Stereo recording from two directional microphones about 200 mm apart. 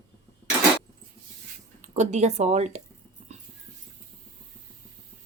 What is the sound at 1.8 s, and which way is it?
Speech, 35° right (ahead or behind).